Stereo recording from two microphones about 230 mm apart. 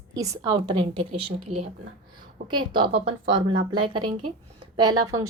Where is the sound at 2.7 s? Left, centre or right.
Right.